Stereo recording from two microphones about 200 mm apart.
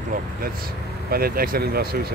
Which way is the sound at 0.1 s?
45° right (ahead or behind).